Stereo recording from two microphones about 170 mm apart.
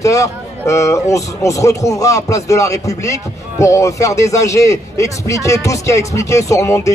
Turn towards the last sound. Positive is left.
turn(degrees=15)  # may be behind; listen again after turning